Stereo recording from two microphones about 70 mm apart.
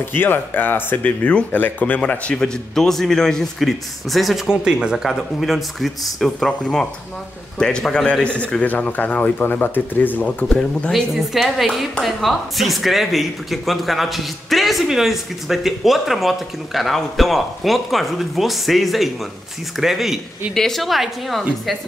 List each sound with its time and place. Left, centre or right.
0.0 s a man's voice: left
10.2 s speech: centre
11.1 s speech: centre